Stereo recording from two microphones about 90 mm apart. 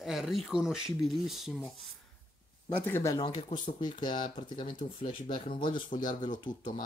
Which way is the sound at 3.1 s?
45° left (ahead or behind).